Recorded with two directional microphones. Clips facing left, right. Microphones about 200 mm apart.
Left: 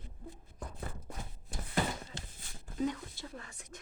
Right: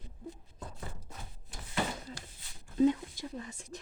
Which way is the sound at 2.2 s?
25° left (ahead or behind).